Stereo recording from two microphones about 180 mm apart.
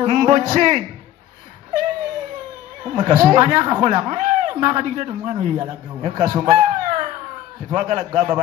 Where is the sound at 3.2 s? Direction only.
45° right (ahead or behind).